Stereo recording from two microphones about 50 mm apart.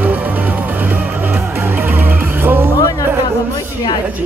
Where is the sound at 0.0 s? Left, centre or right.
Right.